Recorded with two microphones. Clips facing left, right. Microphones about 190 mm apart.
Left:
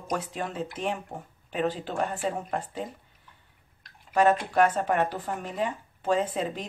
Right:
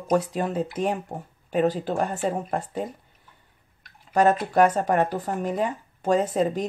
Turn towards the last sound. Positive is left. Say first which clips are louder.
# right 6 dB
turn(degrees=-40)  # may be behind; listen again after turning